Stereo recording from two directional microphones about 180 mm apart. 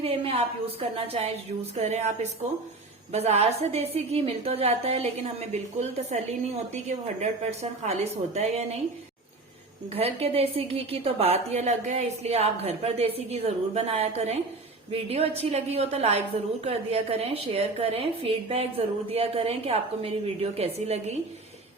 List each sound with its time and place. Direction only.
0.0 s a woman's voice: 35° right (ahead or behind)
9.9 s a woman's voice: 35° right (ahead or behind)